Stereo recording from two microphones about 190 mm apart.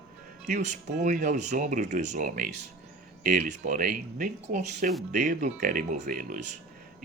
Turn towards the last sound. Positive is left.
turn(degrees=-45)  # may be behind; listen again after turning